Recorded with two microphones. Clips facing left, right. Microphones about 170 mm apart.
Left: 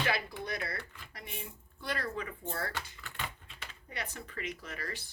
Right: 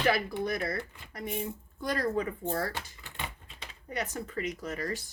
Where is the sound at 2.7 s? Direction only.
25° right (ahead or behind).